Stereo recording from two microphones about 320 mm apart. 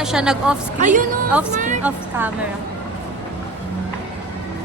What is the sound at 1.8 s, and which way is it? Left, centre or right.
Speech, centre.